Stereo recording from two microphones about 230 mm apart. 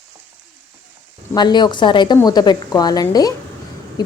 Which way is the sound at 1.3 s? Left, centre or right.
Centre.